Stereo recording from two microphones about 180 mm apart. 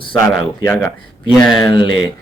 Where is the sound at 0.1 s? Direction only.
10° left (ahead or behind).